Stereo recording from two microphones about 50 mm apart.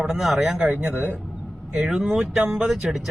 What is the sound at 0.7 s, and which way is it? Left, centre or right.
Speech, right.